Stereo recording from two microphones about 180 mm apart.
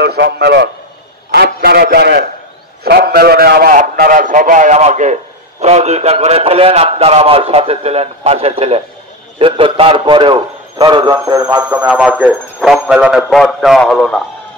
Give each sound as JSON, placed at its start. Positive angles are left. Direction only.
{"t": 0.0, "sound": "a sound", "side_deg": -65}
{"t": 5.6, "sound": "a man's voice", "side_deg": -35}
{"t": 11.6, "sound": "a man's voice", "side_deg": -10}